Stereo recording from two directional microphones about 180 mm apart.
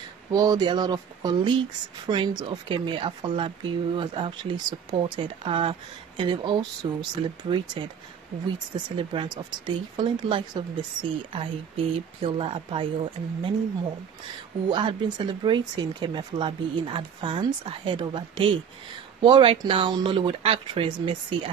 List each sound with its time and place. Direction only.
0.3 s speech: 20° right (ahead or behind)
8.9 s speech: 25° right (ahead or behind)
14.7 s speech: 25° right (ahead or behind)
19.2 s speech: 30° right (ahead or behind)